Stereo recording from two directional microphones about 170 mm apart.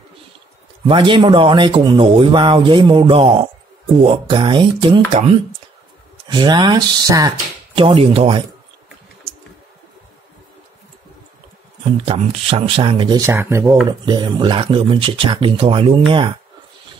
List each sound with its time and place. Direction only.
0.8 s speech: 30° right (ahead or behind)
12.0 s speech: 35° right (ahead or behind); by 13.7 s 15° right (ahead or behind)
13.8 s speech: 25° right (ahead or behind)